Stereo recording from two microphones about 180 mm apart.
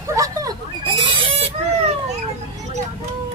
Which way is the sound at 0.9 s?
30° right (ahead or behind).